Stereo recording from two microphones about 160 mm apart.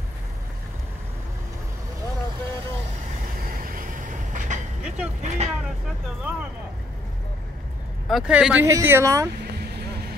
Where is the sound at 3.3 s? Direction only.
65° right (ahead or behind).